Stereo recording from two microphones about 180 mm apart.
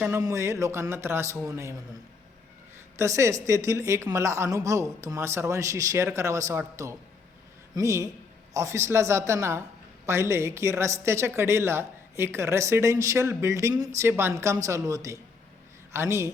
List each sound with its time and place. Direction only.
0.0 s a woman's voice: 15° right (ahead or behind)
3.0 s a woman's voice: 15° right (ahead or behind)